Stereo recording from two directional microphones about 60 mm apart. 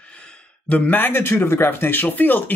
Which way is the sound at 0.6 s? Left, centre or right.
Left.